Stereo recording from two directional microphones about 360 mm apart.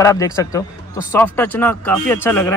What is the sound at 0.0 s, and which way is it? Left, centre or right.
Speech, centre.